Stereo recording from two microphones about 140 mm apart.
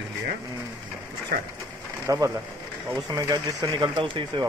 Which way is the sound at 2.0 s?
25° right (ahead or behind).